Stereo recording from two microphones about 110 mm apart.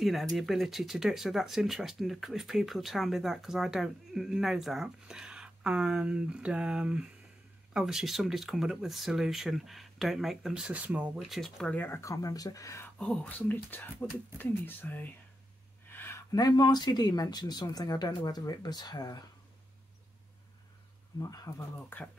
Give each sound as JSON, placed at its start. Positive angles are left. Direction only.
{"t": 0.0, "sound": "speech", "side_deg": 0}
{"t": 11.2, "sound": "speech", "side_deg": 0}
{"t": 11.7, "sound": "speech", "side_deg": 15}
{"t": 12.0, "sound": "speech", "side_deg": 30}
{"t": 13.0, "sound": "speech", "side_deg": 10}
{"t": 15.9, "sound": "a sound", "side_deg": 20}
{"t": 16.3, "sound": "speech", "side_deg": 35}
{"t": 21.2, "sound": "speech", "side_deg": 30}
{"t": 21.5, "sound": "speech", "side_deg": 20}